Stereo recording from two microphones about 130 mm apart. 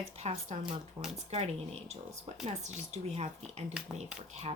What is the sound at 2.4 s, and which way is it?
Speech, 60° right (ahead or behind).